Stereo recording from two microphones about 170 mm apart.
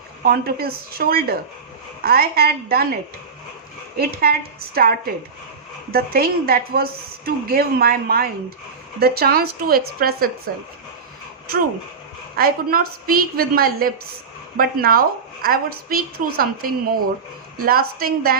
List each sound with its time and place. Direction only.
0.3 s a woman's voice: 60° right (ahead or behind)
4.1 s a woman's voice: 60° right (ahead or behind)
12.4 s a woman's voice: 60° right (ahead or behind)